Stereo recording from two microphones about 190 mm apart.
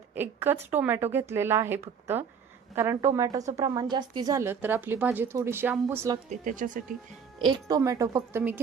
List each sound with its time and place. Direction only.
0.1 s a woman's voice: 10° right (ahead or behind)
6.2 s speech: 40° right (ahead or behind)
7.4 s a woman's voice: 20° right (ahead or behind)